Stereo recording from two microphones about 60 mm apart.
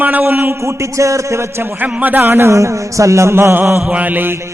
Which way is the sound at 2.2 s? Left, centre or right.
Right.